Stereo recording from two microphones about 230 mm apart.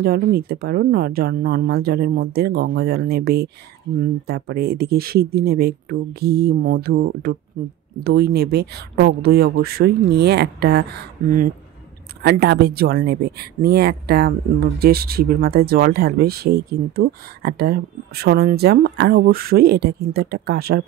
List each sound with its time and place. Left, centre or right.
0.0 s speech: right